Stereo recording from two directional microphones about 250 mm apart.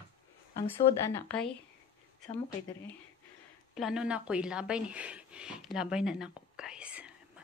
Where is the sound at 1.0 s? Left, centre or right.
Centre.